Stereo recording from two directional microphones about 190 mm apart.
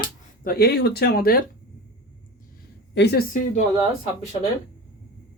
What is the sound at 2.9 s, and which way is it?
Speech, 60° left (ahead or behind).